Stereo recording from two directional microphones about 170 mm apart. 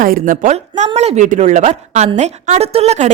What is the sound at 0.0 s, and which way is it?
Speech, 55° right (ahead or behind).